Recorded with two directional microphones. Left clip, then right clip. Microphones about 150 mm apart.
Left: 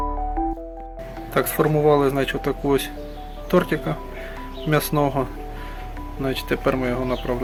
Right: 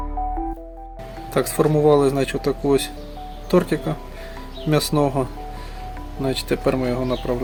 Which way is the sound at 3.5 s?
25° right (ahead or behind).